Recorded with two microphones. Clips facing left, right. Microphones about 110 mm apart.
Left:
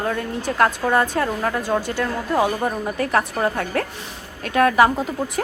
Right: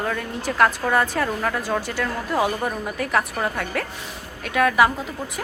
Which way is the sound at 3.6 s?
35° left (ahead or behind).